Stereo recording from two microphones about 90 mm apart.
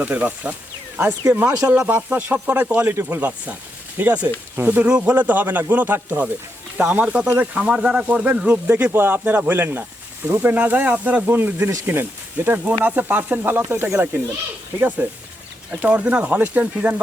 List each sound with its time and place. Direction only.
0.0 s speech: 15° right (ahead or behind)
12.8 s speech: 20° right (ahead or behind)